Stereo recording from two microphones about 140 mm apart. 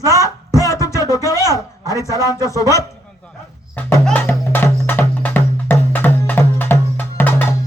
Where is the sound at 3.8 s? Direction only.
10° left (ahead or behind).